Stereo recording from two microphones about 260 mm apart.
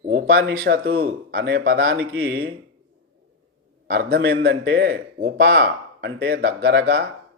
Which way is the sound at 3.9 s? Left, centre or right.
Right.